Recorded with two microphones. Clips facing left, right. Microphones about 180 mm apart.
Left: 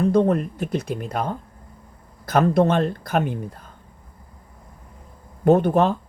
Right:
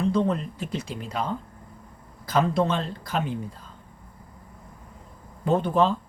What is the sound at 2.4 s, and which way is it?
Speech, 55° left (ahead or behind).